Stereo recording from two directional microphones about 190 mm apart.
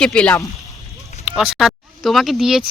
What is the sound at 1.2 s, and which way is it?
Speech, 5° right (ahead or behind).